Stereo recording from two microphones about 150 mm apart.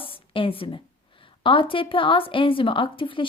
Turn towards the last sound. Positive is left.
turn(degrees=35)  # may be behind; listen again after turning